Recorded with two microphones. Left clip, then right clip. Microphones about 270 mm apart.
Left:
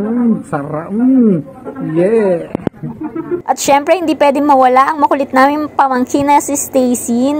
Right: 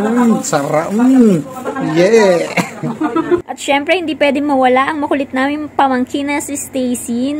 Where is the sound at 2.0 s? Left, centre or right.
Centre.